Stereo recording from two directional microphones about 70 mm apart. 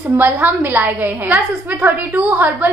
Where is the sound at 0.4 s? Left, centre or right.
Right.